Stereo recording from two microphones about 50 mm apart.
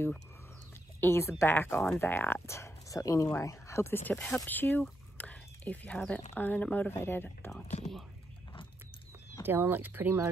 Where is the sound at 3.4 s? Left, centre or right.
Left.